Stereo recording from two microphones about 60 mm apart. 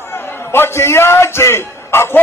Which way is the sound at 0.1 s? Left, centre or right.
Left.